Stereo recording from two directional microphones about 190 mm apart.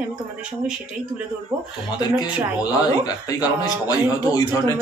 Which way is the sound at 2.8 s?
20° left (ahead or behind).